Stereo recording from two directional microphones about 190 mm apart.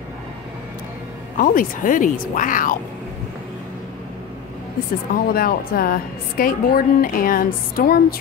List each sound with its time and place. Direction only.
1.3 s a woman's voice: 45° left (ahead or behind)
5.1 s a woman's voice: 50° left (ahead or behind)